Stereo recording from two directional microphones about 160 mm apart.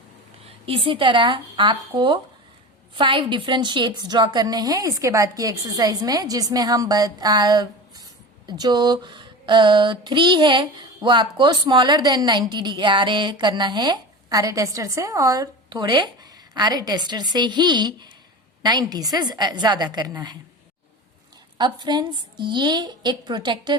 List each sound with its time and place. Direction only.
0.4 s speech: 35° right (ahead or behind)
3.0 s female singing: 30° right (ahead or behind)
21.6 s female singing: 30° right (ahead or behind)